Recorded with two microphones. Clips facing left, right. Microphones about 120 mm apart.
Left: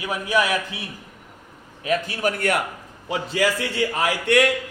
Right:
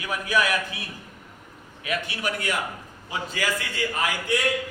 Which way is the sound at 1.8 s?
35° left (ahead or behind).